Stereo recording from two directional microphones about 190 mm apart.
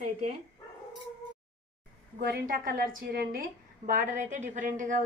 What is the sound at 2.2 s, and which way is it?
A woman's voice, 50° right (ahead or behind).